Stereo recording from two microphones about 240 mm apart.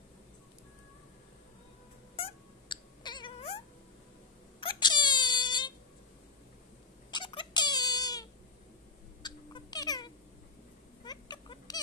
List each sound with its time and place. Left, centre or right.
2.1 s cat: left
4.6 s wail: centre
7.1 s squeak: centre
9.2 s a sound: centre
11.1 s rodents: centre